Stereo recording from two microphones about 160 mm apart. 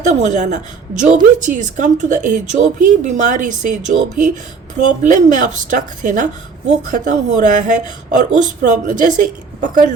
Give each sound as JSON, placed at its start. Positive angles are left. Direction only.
{"t": 0.2, "sound": "a woman's voice", "side_deg": -50}